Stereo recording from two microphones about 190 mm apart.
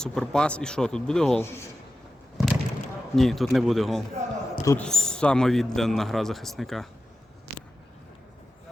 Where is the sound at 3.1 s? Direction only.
Centre (ahead or behind).